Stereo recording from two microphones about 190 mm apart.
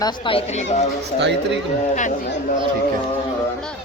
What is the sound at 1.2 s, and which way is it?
Speech, 65° right (ahead or behind).